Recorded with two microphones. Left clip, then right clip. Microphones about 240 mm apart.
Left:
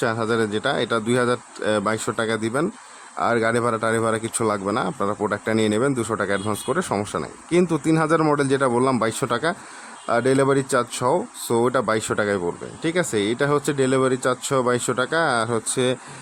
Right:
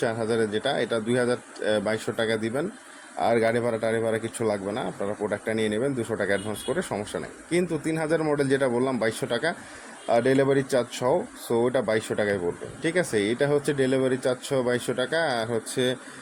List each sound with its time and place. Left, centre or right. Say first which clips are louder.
0.0 s speech: left 3 dB; centre